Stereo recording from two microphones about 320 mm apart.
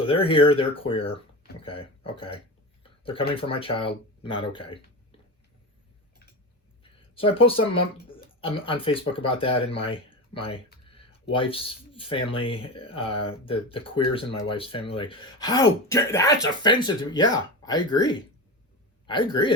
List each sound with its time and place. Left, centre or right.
0.0 s speech: centre
2.8 s a sound: centre
3.3 s speech: centre
7.2 s speech: centre